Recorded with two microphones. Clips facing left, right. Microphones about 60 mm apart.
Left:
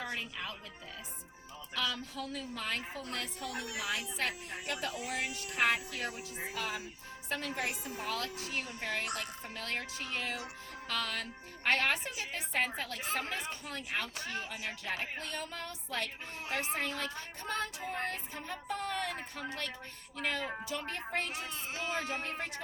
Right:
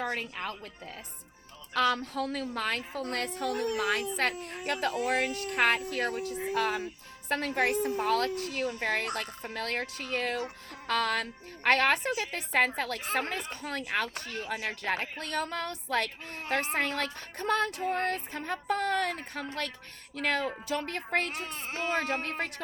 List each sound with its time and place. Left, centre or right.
0.0 s a woman's voice: right
1.7 s a woman's voice: right